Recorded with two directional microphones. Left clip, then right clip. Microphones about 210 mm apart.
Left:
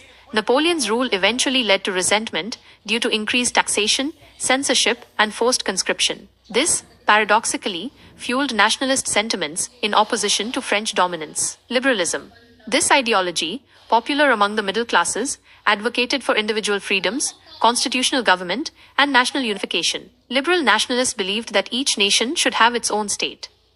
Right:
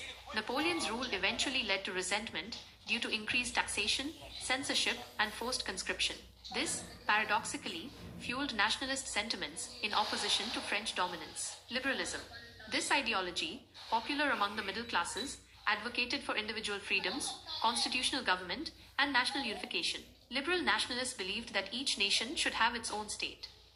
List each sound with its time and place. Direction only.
0.3 s a woman's voice: 45° left (ahead or behind)